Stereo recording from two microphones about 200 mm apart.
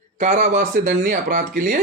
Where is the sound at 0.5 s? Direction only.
45° right (ahead or behind).